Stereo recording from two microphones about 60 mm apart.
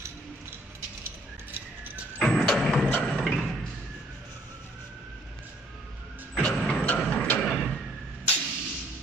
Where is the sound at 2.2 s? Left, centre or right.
Centre.